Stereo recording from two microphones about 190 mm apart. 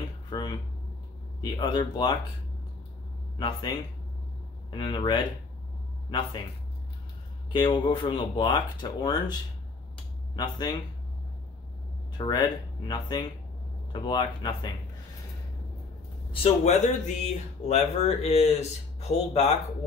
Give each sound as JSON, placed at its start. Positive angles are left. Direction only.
{"t": 0.3, "sound": "a sound", "side_deg": 25}
{"t": 1.4, "sound": "speech", "side_deg": 25}
{"t": 3.3, "sound": "speech", "side_deg": 25}
{"t": 7.5, "sound": "speech", "side_deg": 25}
{"t": 12.2, "sound": "speech", "side_deg": 25}
{"t": 16.3, "sound": "speech", "side_deg": 35}